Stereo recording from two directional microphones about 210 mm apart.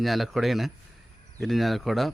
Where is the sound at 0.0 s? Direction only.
Centre (ahead or behind).